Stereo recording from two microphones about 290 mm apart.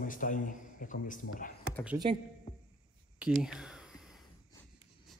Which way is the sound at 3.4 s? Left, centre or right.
Centre.